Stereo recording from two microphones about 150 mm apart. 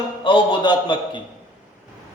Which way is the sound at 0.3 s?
30° left (ahead or behind).